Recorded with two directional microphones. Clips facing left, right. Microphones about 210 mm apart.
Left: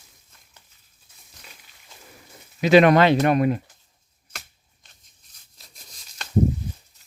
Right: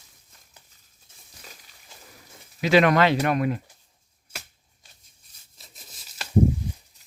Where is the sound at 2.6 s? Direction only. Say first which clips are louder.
Left 4 dB; 20° left (ahead or behind).